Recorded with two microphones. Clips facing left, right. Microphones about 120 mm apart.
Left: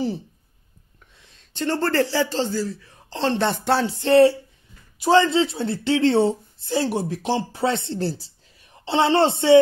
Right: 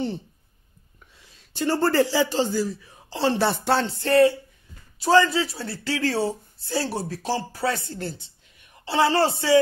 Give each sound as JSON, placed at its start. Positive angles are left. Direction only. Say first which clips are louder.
{"t": 1.2, "sound": "a man's voice", "louder": "even", "side_deg": -5}
{"t": 4.0, "sound": "speech", "louder": "left 4 dB", "side_deg": 25}